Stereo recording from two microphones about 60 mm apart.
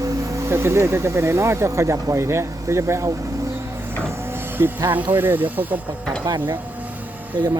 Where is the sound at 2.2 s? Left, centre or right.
Right.